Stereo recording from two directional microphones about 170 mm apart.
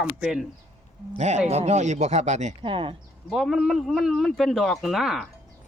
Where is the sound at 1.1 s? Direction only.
40° right (ahead or behind).